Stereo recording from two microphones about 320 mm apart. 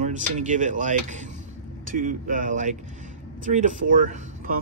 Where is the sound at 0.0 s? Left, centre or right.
Right.